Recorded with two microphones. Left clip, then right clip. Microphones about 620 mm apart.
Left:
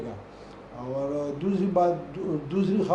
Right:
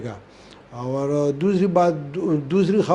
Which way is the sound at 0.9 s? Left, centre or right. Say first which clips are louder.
Right 8 dB; right.